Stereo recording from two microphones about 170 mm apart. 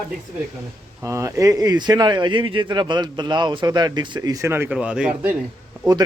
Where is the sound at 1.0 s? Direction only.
15° right (ahead or behind).